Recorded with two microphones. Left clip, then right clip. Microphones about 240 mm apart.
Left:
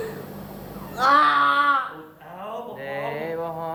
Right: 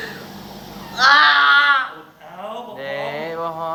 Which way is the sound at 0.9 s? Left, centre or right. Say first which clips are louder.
Right 5 dB; left.